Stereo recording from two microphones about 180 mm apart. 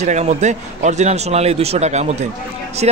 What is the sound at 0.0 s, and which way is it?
Speech, 40° right (ahead or behind).